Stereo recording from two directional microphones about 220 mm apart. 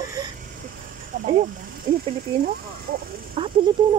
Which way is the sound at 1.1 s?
35° right (ahead or behind).